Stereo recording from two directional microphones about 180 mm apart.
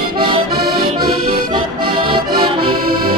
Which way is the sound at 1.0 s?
25° right (ahead or behind).